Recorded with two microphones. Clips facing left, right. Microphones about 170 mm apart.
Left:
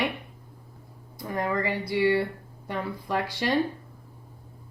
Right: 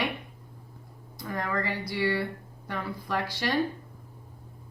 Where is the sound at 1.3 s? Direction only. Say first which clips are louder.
Left 4 dB; 20° left (ahead or behind).